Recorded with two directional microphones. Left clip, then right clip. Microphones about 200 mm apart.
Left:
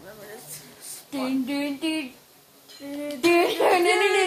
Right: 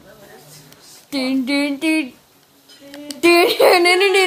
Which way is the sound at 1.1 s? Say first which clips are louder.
Right 8 dB; 35° right (ahead or behind).